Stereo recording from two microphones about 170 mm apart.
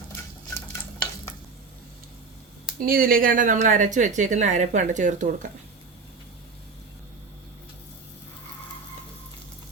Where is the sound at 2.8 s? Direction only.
60° right (ahead or behind).